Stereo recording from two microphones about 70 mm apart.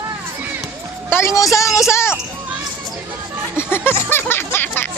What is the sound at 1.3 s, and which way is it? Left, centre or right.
Speech, left.